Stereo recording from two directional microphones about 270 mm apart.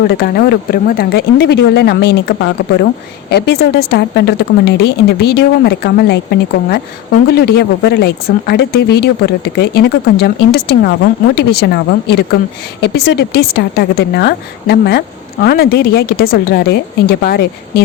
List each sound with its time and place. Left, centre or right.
0.1 s a woman's voice: left